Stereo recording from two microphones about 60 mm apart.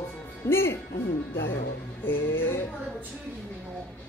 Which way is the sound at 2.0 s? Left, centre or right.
Left.